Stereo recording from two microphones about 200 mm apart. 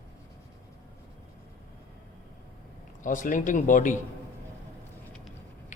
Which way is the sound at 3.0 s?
40° left (ahead or behind).